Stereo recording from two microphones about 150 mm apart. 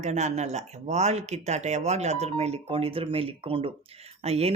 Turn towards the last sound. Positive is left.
turn(degrees=-45)  # may be behind; listen again after turning